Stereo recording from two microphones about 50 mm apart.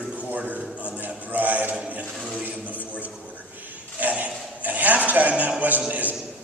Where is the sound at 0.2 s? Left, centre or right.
Right.